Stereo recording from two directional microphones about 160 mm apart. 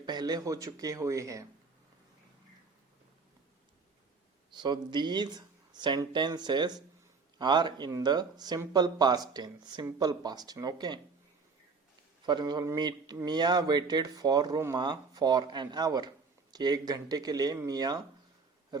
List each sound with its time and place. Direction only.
0.0 s speech: 25° right (ahead or behind)
4.5 s speech: 30° right (ahead or behind)
12.2 s speech: 30° right (ahead or behind)